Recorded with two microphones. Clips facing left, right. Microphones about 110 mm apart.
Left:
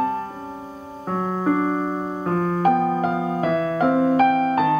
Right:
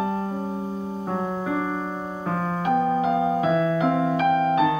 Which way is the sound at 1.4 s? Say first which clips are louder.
Left 5 dB; 45° left (ahead or behind).